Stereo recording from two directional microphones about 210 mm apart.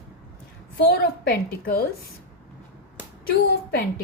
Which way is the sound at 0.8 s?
45° left (ahead or behind).